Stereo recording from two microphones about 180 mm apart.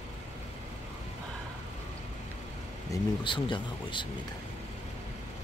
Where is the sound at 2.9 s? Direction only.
25° left (ahead or behind).